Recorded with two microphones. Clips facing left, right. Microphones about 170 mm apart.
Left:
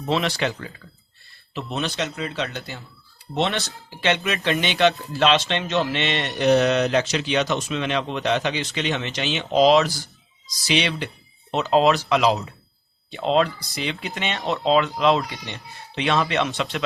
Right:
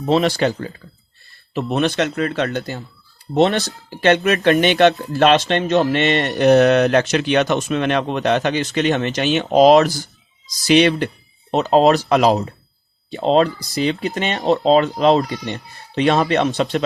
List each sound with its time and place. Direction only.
0.0 s speech: 40° right (ahead or behind)
1.5 s speech: 55° right (ahead or behind)
11.5 s speech: 40° right (ahead or behind)